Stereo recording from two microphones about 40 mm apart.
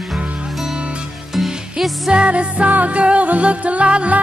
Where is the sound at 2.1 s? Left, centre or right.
Right.